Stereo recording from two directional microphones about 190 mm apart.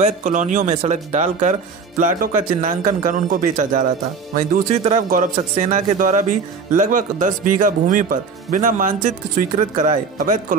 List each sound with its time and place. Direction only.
0.0 s speech: 40° right (ahead or behind)